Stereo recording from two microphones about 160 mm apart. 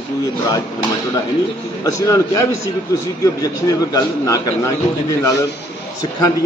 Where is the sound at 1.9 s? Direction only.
20° left (ahead or behind).